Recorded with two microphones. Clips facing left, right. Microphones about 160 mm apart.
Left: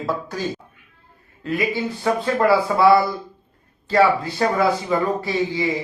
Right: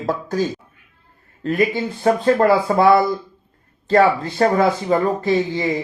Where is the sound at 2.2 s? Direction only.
45° right (ahead or behind).